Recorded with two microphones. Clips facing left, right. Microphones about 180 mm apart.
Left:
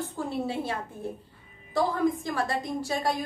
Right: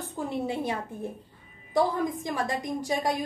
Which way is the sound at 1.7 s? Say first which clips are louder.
Even; 15° right (ahead or behind).